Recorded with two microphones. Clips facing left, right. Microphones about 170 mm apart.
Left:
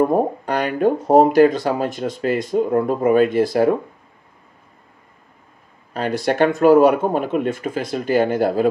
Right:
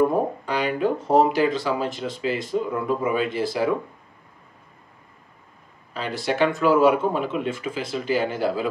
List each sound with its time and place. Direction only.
0.5 s speech: 50° left (ahead or behind)
5.9 s speech: 50° left (ahead or behind)